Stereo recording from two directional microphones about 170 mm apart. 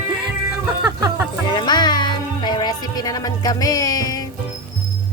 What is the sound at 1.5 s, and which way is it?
Music, 25° left (ahead or behind).